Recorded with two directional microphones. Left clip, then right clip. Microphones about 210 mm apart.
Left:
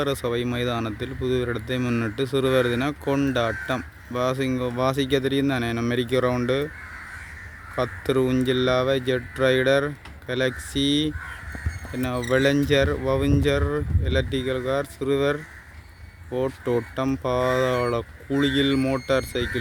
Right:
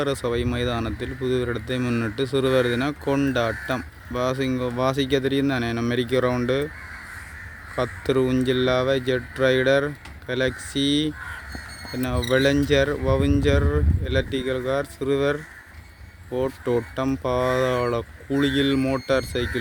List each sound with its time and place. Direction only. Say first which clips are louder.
0.0 s speech: right 1 dB; centre (ahead or behind)
7.8 s speech: right 1 dB; centre (ahead or behind)